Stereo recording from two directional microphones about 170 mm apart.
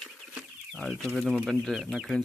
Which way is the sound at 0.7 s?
5° left (ahead or behind).